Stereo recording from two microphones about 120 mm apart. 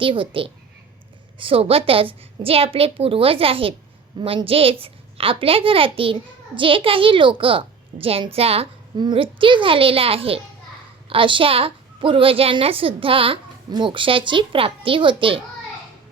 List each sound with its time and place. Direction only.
0.0 s a woman's voice: 45° right (ahead or behind)
9.0 s a woman's voice: 45° right (ahead or behind)